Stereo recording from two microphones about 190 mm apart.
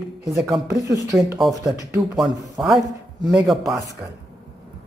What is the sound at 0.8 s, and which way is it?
Speech, 15° right (ahead or behind).